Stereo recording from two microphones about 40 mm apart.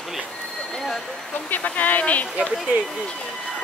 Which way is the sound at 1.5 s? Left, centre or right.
Left.